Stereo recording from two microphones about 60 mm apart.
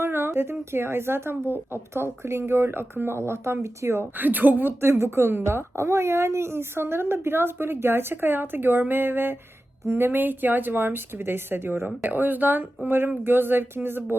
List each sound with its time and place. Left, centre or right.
0.0 s a sound: right
0.7 s a woman's voice: right
4.2 s a woman's voice: right